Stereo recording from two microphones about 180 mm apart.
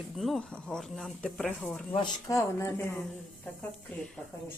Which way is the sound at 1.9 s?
20° left (ahead or behind).